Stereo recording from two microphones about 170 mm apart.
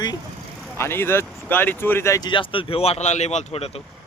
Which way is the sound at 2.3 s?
30° left (ahead or behind).